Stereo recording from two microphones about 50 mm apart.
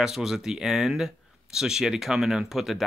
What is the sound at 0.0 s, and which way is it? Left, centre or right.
Speech, centre.